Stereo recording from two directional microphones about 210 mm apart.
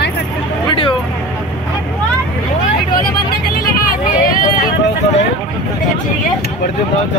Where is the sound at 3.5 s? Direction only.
40° left (ahead or behind).